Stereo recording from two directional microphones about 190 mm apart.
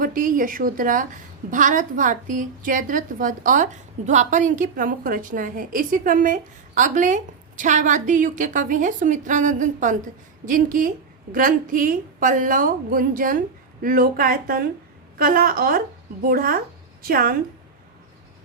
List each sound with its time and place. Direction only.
0.0 s a woman's voice: 45° right (ahead or behind)